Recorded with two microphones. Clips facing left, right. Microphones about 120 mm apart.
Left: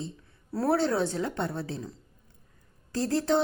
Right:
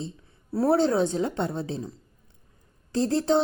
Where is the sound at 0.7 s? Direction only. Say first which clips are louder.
Right 4 dB; 20° right (ahead or behind).